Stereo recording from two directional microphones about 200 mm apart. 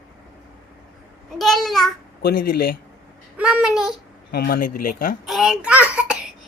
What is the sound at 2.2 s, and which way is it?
Speech, 50° left (ahead or behind).